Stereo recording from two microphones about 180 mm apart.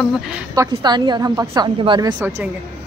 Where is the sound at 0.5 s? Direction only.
20° right (ahead or behind).